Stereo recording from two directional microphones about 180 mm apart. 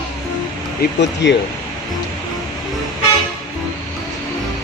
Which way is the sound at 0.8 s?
75° left (ahead or behind).